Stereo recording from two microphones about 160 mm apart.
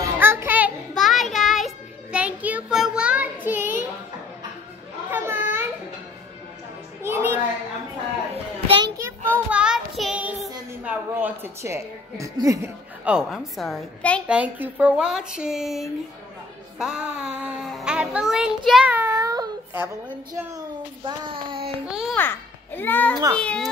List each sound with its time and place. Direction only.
0.2 s music: 15° right (ahead or behind)
0.9 s child singing: centre (ahead or behind)
5.1 s children playing: 10° right (ahead or behind)
7.0 s music: 15° right (ahead or behind)
8.6 s children playing: 30° right (ahead or behind)
8.9 s child singing: 15° right (ahead or behind)
10.8 s a sound: 10° right (ahead or behind)
13.0 s a child's voice: 5° right (ahead or behind)
14.2 s a child's voice: 10° right (ahead or behind)
19.1 s child singing: 25° right (ahead or behind)
21.0 s a sound: 30° right (ahead or behind)
21.8 s a child's voice: 5° right (ahead or behind)
22.1 s a child's voice: 10° left (ahead or behind)